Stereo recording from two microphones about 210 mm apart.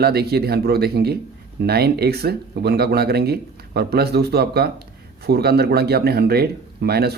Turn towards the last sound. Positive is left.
turn(degrees=-50)  # may be behind; listen again after turning